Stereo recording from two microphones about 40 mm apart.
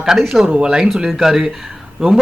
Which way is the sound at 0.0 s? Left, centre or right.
Centre.